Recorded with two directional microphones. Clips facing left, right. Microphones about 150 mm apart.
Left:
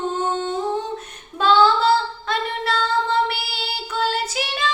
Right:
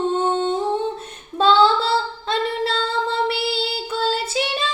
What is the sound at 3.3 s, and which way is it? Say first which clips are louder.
Child singing: right 6 dB; 25° right (ahead or behind).